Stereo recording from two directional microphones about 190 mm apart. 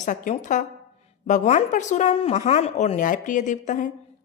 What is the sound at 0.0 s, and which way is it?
A woman's voice, 40° left (ahead or behind).